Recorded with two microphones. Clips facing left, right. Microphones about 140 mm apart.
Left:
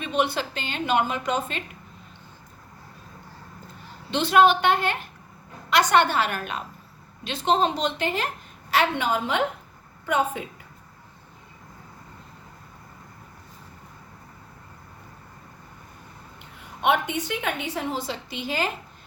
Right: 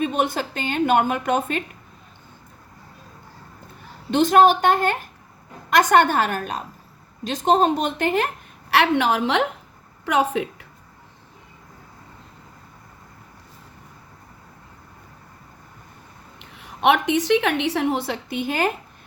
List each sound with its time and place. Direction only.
0.0 s a woman's voice: 45° right (ahead or behind)
4.1 s a woman's voice: 45° right (ahead or behind)
8.7 s a woman's voice: 70° right (ahead or behind); by 10.7 s 90° right
16.4 s a woman's voice: 90° right; by 18.7 s 50° right (ahead or behind)